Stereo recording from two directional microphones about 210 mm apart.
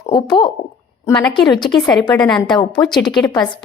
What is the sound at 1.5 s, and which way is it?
Speech, 20° left (ahead or behind).